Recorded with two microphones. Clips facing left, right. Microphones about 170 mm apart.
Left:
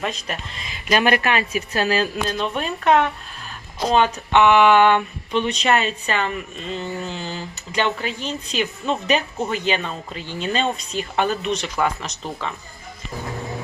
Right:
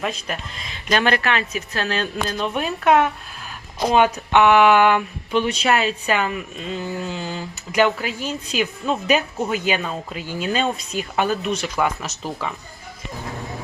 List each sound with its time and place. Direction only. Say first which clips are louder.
0.0 s speech: right 1 dB; centre (ahead or behind)
2.4 s speech: right 4 dB; 5° right (ahead or behind)